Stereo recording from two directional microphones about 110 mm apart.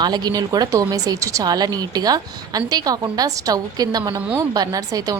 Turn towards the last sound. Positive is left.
turn(degrees=-35)  # may be behind; listen again after turning